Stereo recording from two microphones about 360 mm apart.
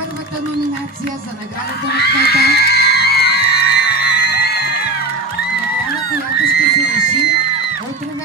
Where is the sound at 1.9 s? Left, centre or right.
Left.